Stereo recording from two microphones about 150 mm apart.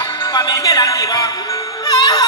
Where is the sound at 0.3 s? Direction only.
30° left (ahead or behind).